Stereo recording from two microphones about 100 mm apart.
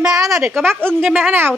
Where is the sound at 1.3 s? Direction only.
20° right (ahead or behind).